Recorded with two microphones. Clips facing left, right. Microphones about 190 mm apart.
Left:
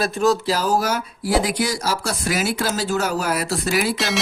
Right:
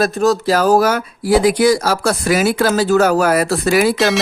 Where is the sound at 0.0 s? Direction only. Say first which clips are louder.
Right 4 dB; 40° right (ahead or behind).